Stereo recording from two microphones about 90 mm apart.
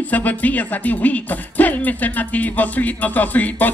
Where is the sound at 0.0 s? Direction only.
20° left (ahead or behind).